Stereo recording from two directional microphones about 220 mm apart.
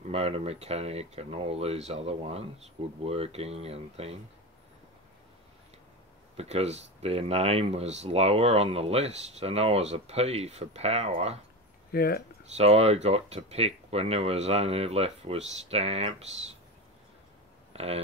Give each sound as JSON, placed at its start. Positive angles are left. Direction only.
{"t": 0.1, "sound": "speech", "side_deg": -25}
{"t": 6.3, "sound": "speech", "side_deg": -30}
{"t": 11.9, "sound": "speech", "side_deg": 45}
{"t": 12.5, "sound": "speech", "side_deg": -30}
{"t": 17.7, "sound": "a man's voice", "side_deg": -25}